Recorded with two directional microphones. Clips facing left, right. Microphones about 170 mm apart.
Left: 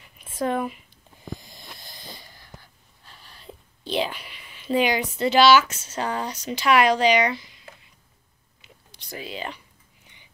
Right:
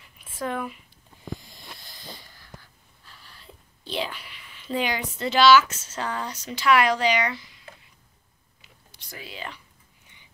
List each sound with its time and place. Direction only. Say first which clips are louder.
0.4 s speech: left 5 dB; 30° left (ahead or behind)
3.8 s speech: left 5 dB; 20° left (ahead or behind)
9.1 s speech: left 5 dB; 20° left (ahead or behind)